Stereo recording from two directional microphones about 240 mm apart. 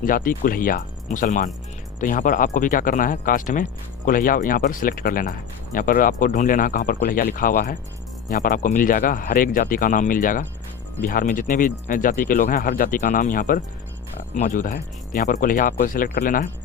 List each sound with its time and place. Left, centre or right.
0.0 s speech: left